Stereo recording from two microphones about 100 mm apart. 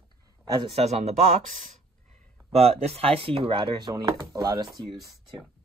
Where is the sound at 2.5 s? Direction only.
90° right; by 3.7 s 65° right (ahead or behind).